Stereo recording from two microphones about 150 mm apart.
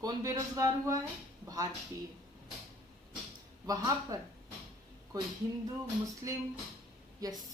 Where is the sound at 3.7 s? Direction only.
25° right (ahead or behind).